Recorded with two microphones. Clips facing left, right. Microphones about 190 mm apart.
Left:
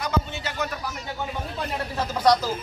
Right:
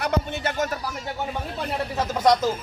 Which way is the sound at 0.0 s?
60° right (ahead or behind).